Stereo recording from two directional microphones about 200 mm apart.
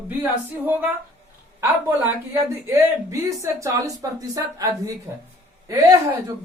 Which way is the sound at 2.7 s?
15° right (ahead or behind).